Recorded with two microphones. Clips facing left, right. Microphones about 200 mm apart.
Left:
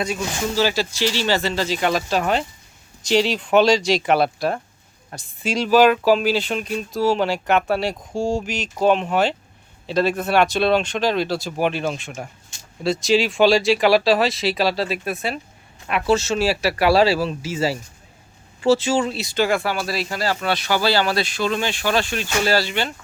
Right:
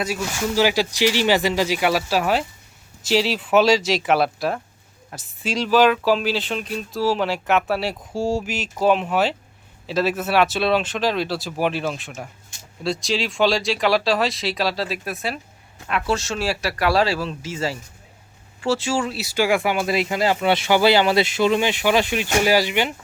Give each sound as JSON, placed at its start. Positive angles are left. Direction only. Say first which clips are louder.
{"t": 0.0, "sound": "speech", "louder": "even", "side_deg": -10}